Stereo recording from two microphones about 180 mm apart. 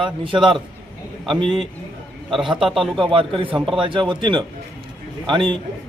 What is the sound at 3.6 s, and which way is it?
Speech, 5° right (ahead or behind).